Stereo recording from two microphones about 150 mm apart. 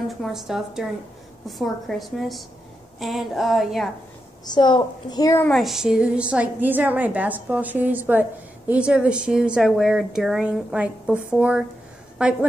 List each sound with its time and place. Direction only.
0.2 s speech: centre (ahead or behind)
4.5 s a woman's voice: 30° left (ahead or behind)
5.4 s a woman's voice: centre (ahead or behind)